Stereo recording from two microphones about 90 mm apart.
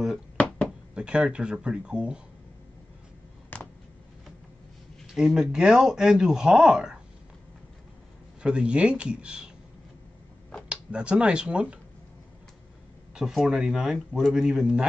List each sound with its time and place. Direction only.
0.7 s speech: 10° right (ahead or behind)
3.5 s a sound: 20° left (ahead or behind)
5.0 s speech: 5° right (ahead or behind)
8.4 s speech: 10° right (ahead or behind)
10.7 s speech: 10° right (ahead or behind)
13.1 s speech: 5° right (ahead or behind)